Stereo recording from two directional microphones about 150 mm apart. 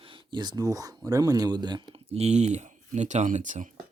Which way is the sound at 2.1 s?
45° right (ahead or behind).